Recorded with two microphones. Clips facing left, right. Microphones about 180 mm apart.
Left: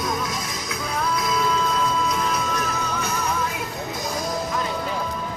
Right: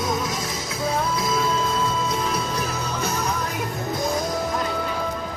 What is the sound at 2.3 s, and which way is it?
Music, 30° right (ahead or behind).